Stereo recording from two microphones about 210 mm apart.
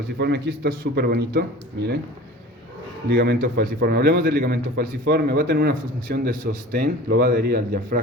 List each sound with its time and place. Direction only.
0.2 s a man's voice: 55° right (ahead or behind)
3.1 s a man's voice: 50° right (ahead or behind)